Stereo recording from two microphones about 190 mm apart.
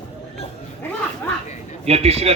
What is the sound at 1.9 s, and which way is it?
Speech, 35° right (ahead or behind).